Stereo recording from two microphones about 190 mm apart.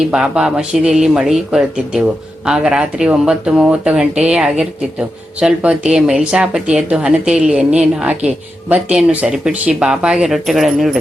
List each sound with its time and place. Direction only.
0.1 s speech: 5° right (ahead or behind)